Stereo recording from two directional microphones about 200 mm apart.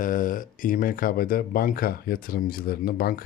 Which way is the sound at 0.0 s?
40° left (ahead or behind).